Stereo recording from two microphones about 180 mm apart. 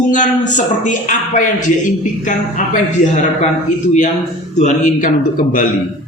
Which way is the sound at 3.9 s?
40° left (ahead or behind).